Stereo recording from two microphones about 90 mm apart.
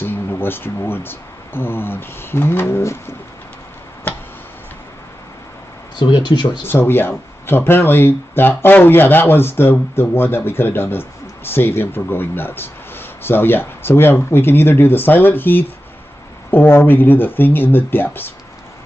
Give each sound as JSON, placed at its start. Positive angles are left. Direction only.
{"t": 0.0, "sound": "speech", "side_deg": 25}
{"t": 4.1, "sound": "tick-tock", "side_deg": 20}
{"t": 5.9, "sound": "speech", "side_deg": 60}
{"t": 6.6, "sound": "speech", "side_deg": 25}